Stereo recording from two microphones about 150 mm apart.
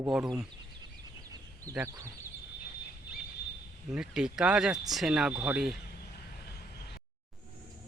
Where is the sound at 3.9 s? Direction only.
5° right (ahead or behind).